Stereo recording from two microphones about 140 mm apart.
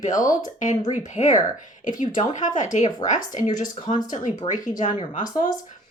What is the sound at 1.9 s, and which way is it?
Speech, 70° left (ahead or behind).